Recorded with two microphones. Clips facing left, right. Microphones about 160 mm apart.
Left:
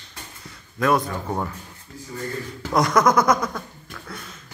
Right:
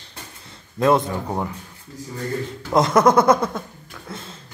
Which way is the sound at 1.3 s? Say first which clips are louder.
Left 1 dB; 15° right (ahead or behind).